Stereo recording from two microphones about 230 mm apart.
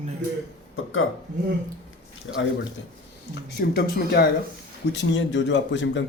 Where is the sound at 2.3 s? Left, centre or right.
Left.